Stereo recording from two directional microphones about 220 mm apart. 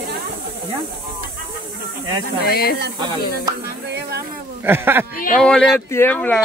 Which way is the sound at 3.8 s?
50° right (ahead or behind).